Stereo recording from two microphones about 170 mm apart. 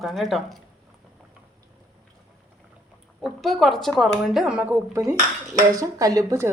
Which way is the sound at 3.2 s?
Centre (ahead or behind).